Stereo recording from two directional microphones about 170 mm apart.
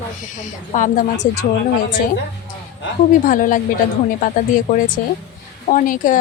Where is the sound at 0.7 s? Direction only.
50° left (ahead or behind).